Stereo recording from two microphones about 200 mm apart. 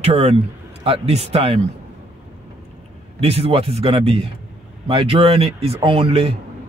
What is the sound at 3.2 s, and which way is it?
Speech, 30° right (ahead or behind).